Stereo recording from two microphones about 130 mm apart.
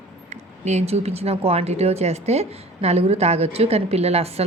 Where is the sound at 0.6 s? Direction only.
60° right (ahead or behind).